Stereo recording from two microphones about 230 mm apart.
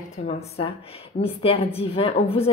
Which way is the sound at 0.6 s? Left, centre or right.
Left.